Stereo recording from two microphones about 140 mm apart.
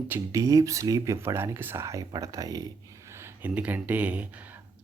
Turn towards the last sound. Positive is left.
turn(degrees=-10)  # may be behind; listen again after turning